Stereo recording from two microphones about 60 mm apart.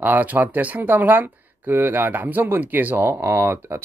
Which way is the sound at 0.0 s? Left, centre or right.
Right.